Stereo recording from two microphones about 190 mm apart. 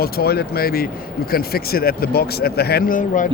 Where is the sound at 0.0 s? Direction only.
55° left (ahead or behind).